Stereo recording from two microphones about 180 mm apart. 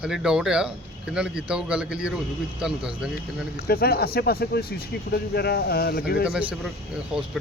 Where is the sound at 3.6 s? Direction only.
60° left (ahead or behind).